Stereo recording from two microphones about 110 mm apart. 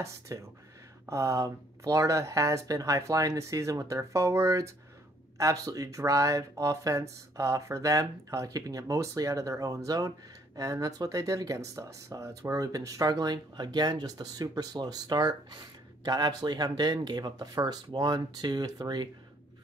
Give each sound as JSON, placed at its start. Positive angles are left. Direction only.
{"t": 0.0, "sound": "speech", "side_deg": -25}